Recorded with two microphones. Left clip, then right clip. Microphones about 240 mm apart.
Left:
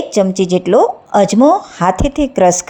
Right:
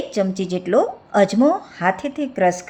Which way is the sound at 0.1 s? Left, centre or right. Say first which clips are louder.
Left 11 dB; left.